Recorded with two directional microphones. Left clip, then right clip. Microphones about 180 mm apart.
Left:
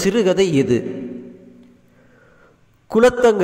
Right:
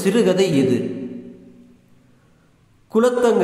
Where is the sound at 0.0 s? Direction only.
35° left (ahead or behind).